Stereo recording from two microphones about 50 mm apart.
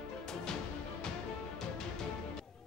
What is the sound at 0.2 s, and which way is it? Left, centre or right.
Music, centre.